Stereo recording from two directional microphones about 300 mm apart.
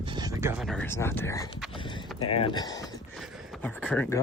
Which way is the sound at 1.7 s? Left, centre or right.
Centre.